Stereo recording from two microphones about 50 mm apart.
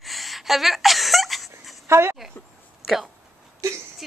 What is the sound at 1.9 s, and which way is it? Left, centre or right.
Speech, right.